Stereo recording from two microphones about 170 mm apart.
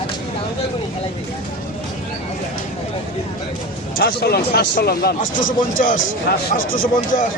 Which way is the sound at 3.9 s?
65° left (ahead or behind).